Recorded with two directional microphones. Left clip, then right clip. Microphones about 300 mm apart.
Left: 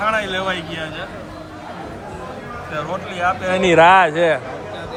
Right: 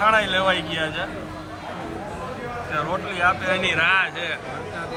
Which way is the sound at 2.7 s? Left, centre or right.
Centre.